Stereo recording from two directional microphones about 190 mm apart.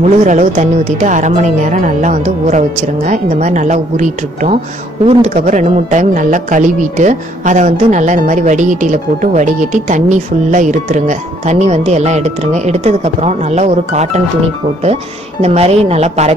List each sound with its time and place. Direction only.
0.0 s speech: 40° right (ahead or behind)
15.4 s speech: 35° right (ahead or behind)